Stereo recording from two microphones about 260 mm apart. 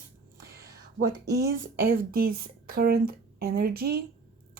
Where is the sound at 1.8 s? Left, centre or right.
Right.